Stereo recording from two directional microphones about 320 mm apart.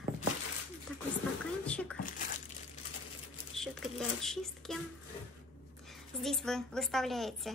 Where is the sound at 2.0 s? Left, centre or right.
Left.